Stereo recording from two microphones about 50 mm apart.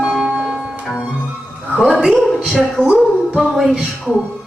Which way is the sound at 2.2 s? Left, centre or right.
Centre.